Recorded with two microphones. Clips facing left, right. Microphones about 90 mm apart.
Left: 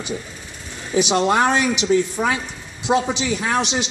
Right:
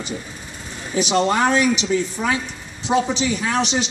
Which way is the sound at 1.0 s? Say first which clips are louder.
Even; 15° left (ahead or behind).